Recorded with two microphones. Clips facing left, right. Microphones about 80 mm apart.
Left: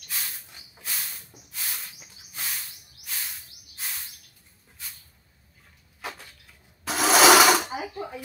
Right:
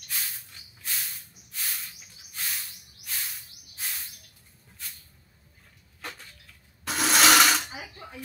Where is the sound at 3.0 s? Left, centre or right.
Centre.